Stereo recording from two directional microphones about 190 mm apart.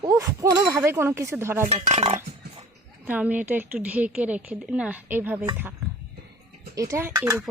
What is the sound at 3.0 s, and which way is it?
A woman's voice, 10° right (ahead or behind).